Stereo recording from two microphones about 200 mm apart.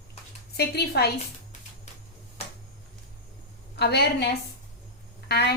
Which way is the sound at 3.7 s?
55° left (ahead or behind).